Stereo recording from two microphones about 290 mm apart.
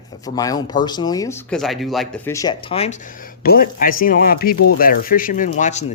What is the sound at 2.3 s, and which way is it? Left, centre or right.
Speech, centre.